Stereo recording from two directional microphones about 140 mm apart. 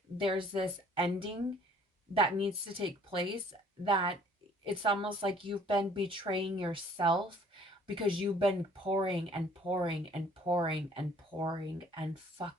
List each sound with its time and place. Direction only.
0.2 s a woman's voice: 40° right (ahead or behind)